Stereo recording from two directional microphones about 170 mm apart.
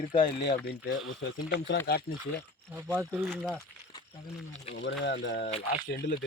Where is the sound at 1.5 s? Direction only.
80° left.